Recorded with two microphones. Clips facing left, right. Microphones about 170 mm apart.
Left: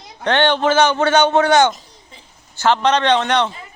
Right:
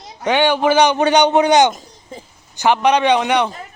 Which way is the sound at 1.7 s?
45° right (ahead or behind).